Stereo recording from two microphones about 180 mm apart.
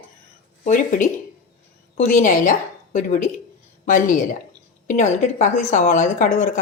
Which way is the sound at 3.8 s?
45° left (ahead or behind).